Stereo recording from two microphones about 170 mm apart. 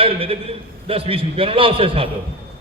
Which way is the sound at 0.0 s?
35° right (ahead or behind).